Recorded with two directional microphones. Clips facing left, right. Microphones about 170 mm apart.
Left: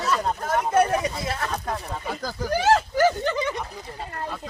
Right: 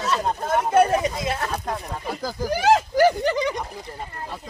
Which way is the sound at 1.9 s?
Centre (ahead or behind).